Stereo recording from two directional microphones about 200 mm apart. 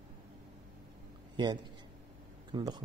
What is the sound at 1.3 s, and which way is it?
A man's voice, 20° right (ahead or behind).